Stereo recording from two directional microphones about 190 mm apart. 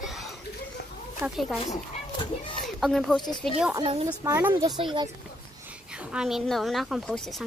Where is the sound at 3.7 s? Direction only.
25° right (ahead or behind).